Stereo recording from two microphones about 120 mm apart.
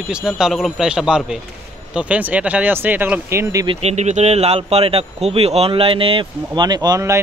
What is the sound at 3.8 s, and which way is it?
Speech, 70° right (ahead or behind).